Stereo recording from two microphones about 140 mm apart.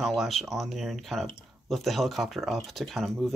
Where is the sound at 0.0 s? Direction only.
Centre (ahead or behind).